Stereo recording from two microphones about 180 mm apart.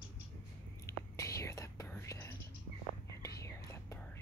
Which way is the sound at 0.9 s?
15° left (ahead or behind).